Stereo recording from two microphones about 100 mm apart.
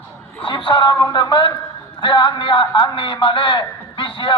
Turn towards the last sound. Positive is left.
turn(degrees=55)  # may be behind; listen again after turning